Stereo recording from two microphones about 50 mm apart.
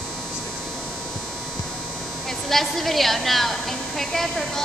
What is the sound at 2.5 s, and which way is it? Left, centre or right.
A woman's voice, centre.